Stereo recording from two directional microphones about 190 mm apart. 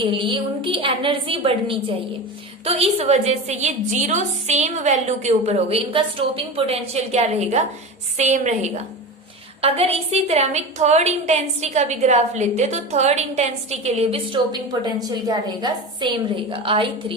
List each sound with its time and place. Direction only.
0.0 s a woman's voice: 25° right (ahead or behind)